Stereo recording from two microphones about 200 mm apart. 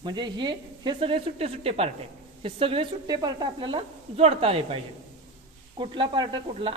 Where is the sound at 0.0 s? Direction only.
20° right (ahead or behind).